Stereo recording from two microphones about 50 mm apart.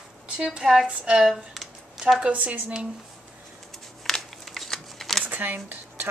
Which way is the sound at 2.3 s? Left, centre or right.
Right.